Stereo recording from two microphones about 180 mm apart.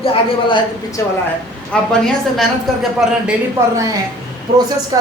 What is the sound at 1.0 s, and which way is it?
Speech, 15° left (ahead or behind).